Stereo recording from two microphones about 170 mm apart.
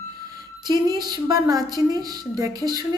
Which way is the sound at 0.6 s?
25° right (ahead or behind).